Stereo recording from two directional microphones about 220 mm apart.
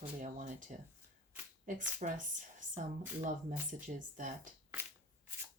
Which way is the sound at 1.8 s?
35° right (ahead or behind).